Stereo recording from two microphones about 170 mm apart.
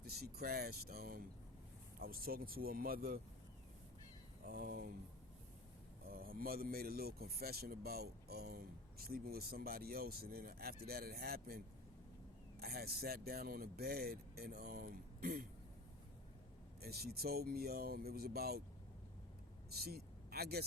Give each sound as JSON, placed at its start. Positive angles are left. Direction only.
{"t": 0.0, "sound": "speech", "side_deg": -65}
{"t": 4.4, "sound": "speech", "side_deg": -60}
{"t": 6.1, "sound": "speech", "side_deg": -60}
{"t": 16.8, "sound": "speech", "side_deg": -65}
{"t": 19.7, "sound": "speech", "side_deg": -65}